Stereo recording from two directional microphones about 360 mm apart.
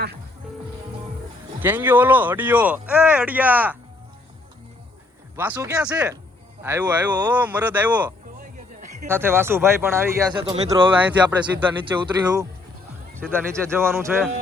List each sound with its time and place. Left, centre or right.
1.5 s speech: centre
5.4 s speech: centre
8.4 s music: right
9.0 s speech: centre